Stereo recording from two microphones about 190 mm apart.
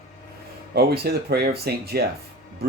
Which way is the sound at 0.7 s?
55° right (ahead or behind).